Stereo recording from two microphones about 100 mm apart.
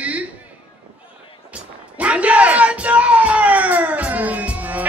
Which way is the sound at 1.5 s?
15° right (ahead or behind).